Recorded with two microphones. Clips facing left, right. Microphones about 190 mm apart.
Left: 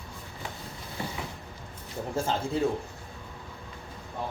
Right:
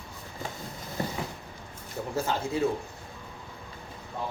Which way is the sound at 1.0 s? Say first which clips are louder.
Right 4 dB; 40° right (ahead or behind).